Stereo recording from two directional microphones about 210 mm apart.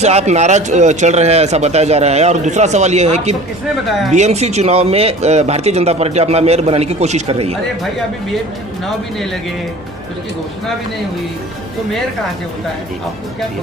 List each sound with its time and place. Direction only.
0.0 s a man's voice: 30° right (ahead or behind)
9.1 s speech: centre (ahead or behind)